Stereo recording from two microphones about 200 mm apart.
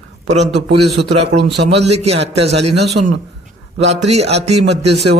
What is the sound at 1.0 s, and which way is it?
Speech, 60° right (ahead or behind).